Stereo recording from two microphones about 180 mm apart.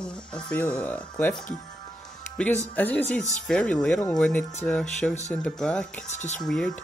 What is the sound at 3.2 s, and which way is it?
Speech, 40° left (ahead or behind).